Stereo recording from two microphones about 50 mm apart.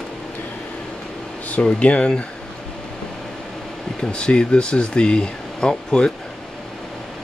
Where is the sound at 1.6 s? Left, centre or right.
Left.